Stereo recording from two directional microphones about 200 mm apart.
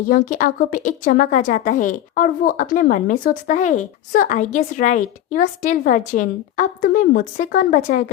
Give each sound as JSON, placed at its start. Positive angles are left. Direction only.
{"t": 0.1, "sound": "a woman's voice", "side_deg": 45}